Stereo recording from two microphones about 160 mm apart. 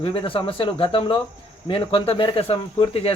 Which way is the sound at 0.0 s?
35° left (ahead or behind).